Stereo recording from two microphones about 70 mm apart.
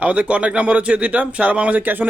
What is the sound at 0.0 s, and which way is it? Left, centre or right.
Speech, centre.